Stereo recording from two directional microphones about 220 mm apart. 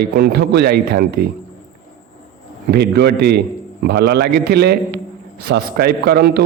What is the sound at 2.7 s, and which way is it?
A man's voice, 45° right (ahead or behind).